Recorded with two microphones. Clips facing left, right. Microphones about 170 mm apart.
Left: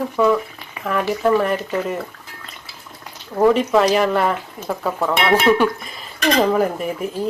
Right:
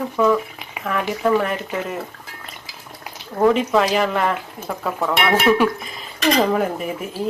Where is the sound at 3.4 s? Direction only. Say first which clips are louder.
Left 2 dB; centre (ahead or behind).